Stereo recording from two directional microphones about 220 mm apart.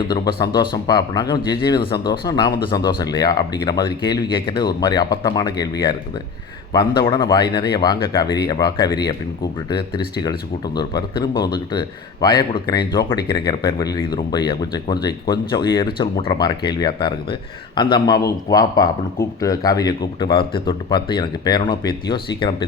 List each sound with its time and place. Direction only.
0.1 s a man's voice: 20° left (ahead or behind)